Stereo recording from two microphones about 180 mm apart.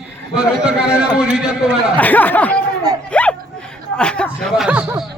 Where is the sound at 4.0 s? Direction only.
5° left (ahead or behind).